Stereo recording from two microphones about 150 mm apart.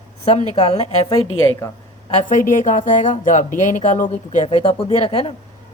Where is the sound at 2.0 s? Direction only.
50° left (ahead or behind).